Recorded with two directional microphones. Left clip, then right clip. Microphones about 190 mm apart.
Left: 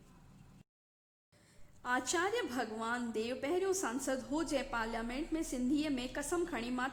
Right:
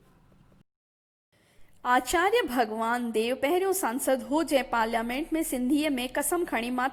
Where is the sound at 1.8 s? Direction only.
30° right (ahead or behind).